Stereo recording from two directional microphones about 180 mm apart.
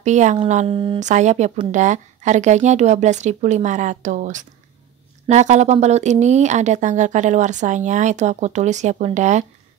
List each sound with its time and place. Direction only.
0.0 s speech: 40° right (ahead or behind)